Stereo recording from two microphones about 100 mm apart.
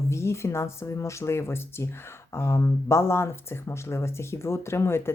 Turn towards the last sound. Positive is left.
turn(degrees=25)  # may be behind; listen again after turning